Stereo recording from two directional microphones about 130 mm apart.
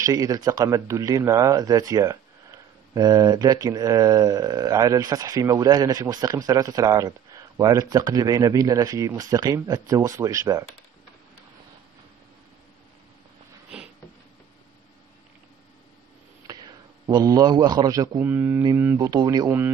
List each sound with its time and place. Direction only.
0.0 s speech: 30° right (ahead or behind)
16.4 s a man's voice: 30° right (ahead or behind)
18.2 s speech: 15° right (ahead or behind)
18.9 s speech: 30° right (ahead or behind)